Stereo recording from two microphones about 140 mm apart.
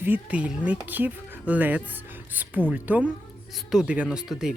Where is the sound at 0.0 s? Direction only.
10° right (ahead or behind).